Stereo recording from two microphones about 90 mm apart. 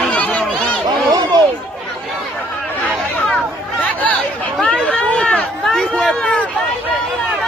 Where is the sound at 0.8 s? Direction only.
50° right (ahead or behind).